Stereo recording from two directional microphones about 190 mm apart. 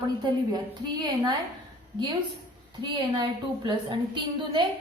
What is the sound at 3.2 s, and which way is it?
A woman's voice, 25° right (ahead or behind).